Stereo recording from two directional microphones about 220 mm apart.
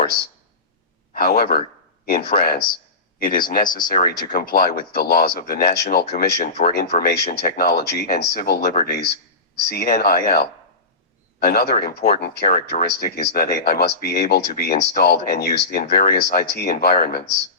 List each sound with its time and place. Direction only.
1.1 s speech: 45° left (ahead or behind)